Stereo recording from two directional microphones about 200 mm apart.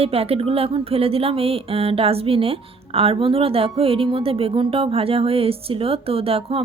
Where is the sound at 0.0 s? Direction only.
30° right (ahead or behind).